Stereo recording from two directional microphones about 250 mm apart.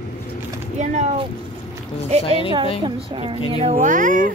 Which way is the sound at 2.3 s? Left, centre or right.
Left.